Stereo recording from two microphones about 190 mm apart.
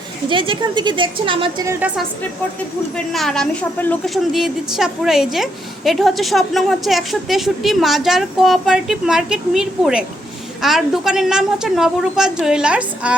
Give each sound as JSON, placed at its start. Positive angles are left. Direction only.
{"t": 0.3, "sound": "a woman's voice", "side_deg": -25}
{"t": 2.9, "sound": "a woman's voice", "side_deg": 0}